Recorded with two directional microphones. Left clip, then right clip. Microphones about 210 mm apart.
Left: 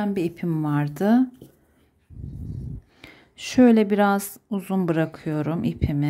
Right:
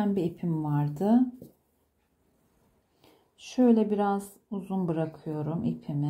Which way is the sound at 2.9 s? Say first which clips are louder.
Left 12 dB; 30° left (ahead or behind).